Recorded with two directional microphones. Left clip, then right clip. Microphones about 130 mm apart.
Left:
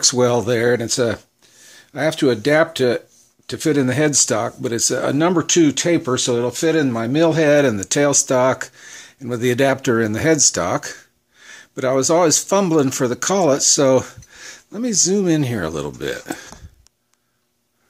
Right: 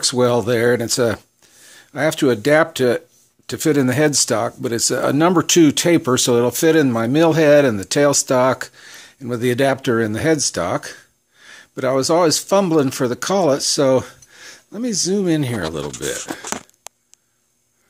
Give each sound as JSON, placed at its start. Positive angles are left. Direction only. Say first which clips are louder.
{"t": 0.0, "sound": "speech", "louder": "even", "side_deg": -20}